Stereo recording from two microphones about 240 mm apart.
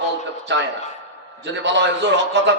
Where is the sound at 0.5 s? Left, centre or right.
Right.